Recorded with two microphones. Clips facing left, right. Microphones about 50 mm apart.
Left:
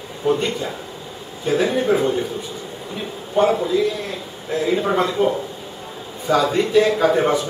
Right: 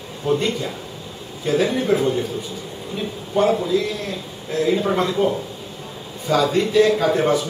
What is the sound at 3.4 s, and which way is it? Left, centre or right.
A man's voice, centre.